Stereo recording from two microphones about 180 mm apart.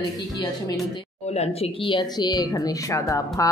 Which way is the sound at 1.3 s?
35° left (ahead or behind).